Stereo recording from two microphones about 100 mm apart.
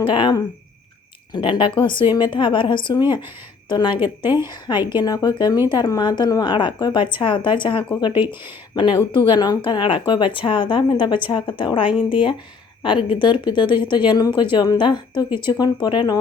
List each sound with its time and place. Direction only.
0.0 s a woman's voice: 50° left (ahead or behind)
4.0 s a woman's voice: 20° right (ahead or behind)
4.4 s a woman's voice: 45° left (ahead or behind)